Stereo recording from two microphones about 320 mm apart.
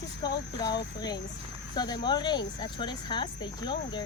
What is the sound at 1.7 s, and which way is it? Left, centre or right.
Speech, centre.